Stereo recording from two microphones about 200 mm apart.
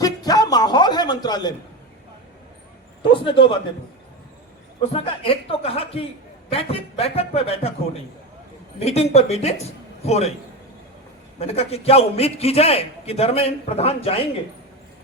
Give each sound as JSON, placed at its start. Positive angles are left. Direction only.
{"t": 0.0, "sound": "a sound", "side_deg": 20}
{"t": 3.0, "sound": "a man's voice", "side_deg": 25}
{"t": 4.8, "sound": "a man's voice", "side_deg": 30}
{"t": 8.8, "sound": "a man's voice", "side_deg": 30}
{"t": 11.3, "sound": "a man's voice", "side_deg": 30}